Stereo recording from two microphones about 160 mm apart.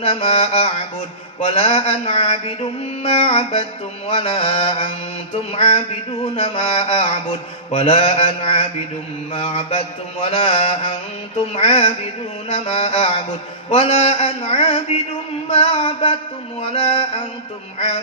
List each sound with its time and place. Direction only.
0.0 s mantra: 35° left (ahead or behind)